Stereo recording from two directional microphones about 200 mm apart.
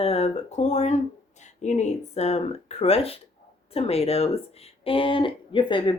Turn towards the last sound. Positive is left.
turn(degrees=25)  # may be behind; listen again after turning